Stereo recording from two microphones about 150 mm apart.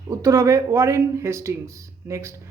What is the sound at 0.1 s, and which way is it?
Speech, 25° right (ahead or behind).